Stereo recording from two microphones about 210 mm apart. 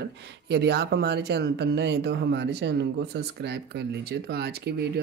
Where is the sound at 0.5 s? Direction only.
50° right (ahead or behind).